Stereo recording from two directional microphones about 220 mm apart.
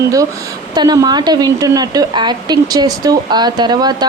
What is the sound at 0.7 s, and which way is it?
Speech, 20° right (ahead or behind).